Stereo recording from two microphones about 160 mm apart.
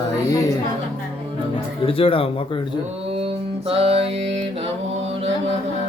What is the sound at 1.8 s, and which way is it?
Speech, 35° left (ahead or behind).